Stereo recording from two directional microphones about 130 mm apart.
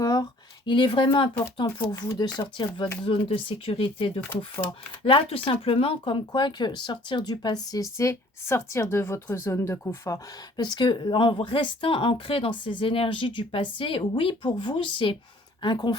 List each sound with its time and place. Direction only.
0.0 s a sound: 30° left (ahead or behind)
1.9 s speech: 30° left (ahead or behind)
4.2 s speech: 15° left (ahead or behind)
5.0 s speech: 45° left (ahead or behind); by 10.2 s 20° left (ahead or behind)
10.6 s speech: 35° left (ahead or behind)